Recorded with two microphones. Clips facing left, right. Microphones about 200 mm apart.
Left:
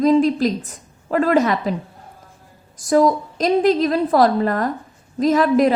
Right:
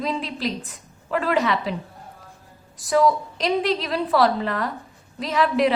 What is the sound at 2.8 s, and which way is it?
A woman's voice, 45° left (ahead or behind).